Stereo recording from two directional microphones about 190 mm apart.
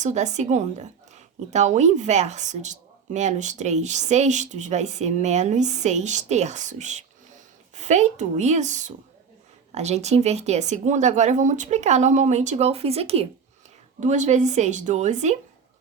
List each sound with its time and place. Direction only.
0.0 s a woman's voice: 40° right (ahead or behind)